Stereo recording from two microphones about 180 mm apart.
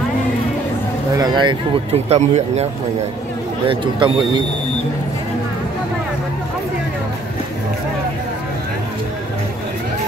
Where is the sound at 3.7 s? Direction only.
25° right (ahead or behind).